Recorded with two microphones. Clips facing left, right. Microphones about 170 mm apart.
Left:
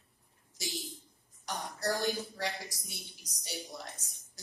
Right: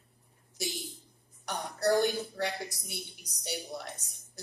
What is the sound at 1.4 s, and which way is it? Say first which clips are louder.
A woman's voice: right 5 dB; 60° right (ahead or behind).